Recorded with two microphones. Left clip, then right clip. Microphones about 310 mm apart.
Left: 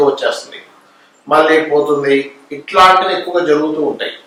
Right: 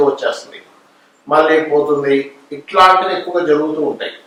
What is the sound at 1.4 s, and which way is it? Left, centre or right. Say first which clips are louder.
Speech: left 1 dB; centre.